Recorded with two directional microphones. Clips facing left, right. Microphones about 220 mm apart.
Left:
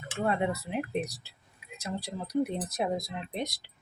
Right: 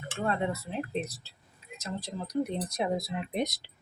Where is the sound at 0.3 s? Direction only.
10° left (ahead or behind); by 3.2 s 5° right (ahead or behind).